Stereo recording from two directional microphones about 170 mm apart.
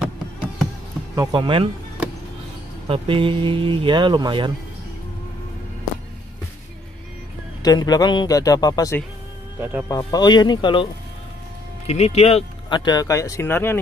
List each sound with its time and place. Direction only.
1.1 s speech: 25° right (ahead or behind)
2.9 s speech: 30° right (ahead or behind)
7.6 s speech: 25° left (ahead or behind)
9.6 s speech: 10° right (ahead or behind)
9.8 s speech: 20° left (ahead or behind)
11.8 s speech: 40° left (ahead or behind); by 13.7 s 15° left (ahead or behind)